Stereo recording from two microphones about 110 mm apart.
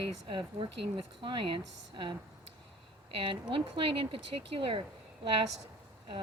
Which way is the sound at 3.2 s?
55° right (ahead or behind).